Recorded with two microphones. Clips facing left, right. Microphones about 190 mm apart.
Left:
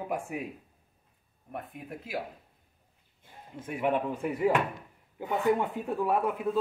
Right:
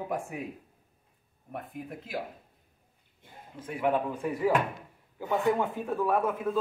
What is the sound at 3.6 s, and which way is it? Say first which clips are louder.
Speech: right 1 dB; 20° left (ahead or behind).